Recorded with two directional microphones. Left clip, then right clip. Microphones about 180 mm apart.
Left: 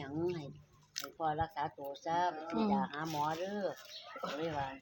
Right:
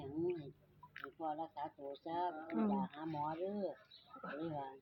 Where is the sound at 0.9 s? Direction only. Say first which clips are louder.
Left 7 dB; 35° left (ahead or behind).